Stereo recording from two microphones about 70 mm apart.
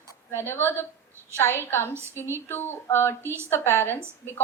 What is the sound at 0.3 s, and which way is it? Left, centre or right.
Speech, left.